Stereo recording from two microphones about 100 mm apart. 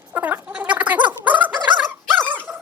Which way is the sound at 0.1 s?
20° right (ahead or behind).